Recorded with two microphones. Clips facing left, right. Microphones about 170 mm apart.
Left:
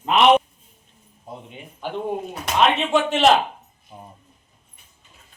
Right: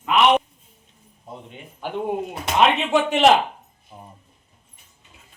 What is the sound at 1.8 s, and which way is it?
A man's voice, 10° right (ahead or behind).